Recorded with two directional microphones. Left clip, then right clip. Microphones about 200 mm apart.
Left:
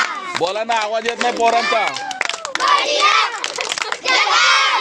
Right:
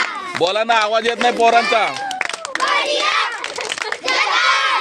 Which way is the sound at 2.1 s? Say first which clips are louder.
Even; 20° left (ahead or behind).